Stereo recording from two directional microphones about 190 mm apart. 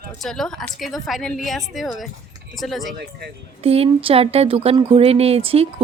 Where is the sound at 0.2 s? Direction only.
Centre (ahead or behind).